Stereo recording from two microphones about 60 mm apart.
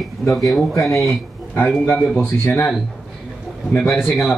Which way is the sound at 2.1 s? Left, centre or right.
Left.